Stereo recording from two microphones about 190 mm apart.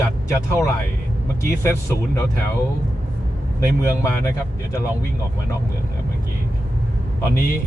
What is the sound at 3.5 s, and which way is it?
Speech, 15° left (ahead or behind).